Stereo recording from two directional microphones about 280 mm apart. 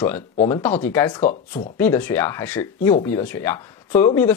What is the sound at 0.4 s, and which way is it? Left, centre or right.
Speech, centre.